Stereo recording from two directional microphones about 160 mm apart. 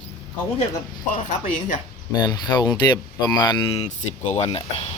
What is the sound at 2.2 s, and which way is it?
Speech, 25° left (ahead or behind).